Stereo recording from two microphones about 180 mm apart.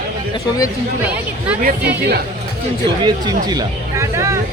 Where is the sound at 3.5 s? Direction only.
20° right (ahead or behind).